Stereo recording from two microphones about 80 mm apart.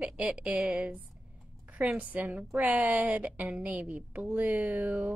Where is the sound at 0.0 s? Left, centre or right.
Centre.